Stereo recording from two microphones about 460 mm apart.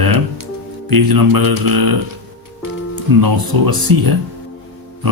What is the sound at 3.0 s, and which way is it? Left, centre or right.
Speech, right.